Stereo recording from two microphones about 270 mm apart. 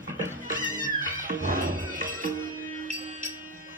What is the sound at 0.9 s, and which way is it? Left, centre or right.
Music, right.